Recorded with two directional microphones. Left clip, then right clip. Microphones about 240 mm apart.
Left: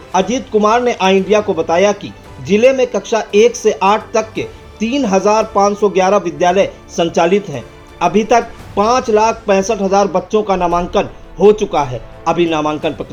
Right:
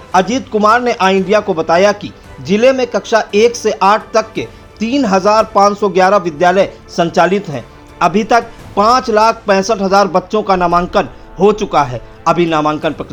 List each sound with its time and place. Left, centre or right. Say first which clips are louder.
0.1 s speech: right 2 dB; centre